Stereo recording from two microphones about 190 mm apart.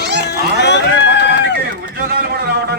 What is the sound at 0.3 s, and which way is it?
Cat, 65° left (ahead or behind).